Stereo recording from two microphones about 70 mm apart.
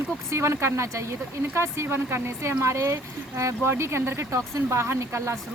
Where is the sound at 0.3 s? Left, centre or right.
Right.